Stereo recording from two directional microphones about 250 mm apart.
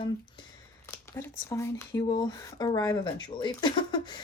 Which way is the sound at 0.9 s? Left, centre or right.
Centre.